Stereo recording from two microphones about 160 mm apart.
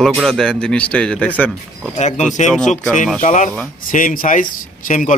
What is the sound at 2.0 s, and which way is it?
A man's voice, 45° left (ahead or behind).